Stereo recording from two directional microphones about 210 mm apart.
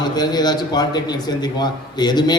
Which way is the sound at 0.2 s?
20° left (ahead or behind).